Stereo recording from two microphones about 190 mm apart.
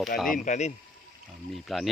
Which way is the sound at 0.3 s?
40° left (ahead or behind).